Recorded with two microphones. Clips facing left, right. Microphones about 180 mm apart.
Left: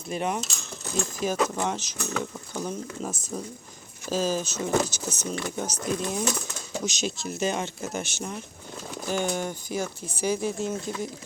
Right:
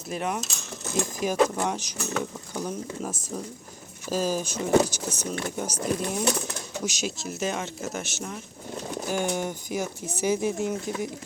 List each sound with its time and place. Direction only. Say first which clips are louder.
0.1 s speech: left 1 dB; centre (ahead or behind)
0.9 s speech: right 1 dB; 15° right (ahead or behind)
2.5 s pigeon: even; 10° right (ahead or behind)
3.0 s speech: even; 10° right (ahead or behind)
8.9 s speech: even; 10° right (ahead or behind)